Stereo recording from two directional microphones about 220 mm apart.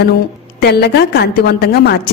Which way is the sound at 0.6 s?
50° left (ahead or behind).